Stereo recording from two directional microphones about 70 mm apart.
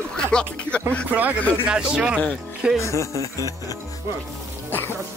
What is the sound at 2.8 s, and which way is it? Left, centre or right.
Speech, left.